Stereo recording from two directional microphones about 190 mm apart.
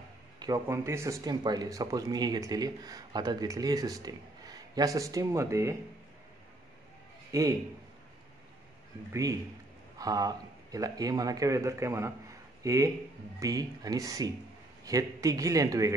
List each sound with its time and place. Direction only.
0.4 s speech: 15° right (ahead or behind)
7.3 s speech: 15° right (ahead or behind)
9.1 s speech: 15° right (ahead or behind)